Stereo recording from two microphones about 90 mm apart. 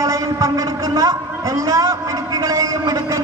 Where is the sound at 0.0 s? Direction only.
35° right (ahead or behind).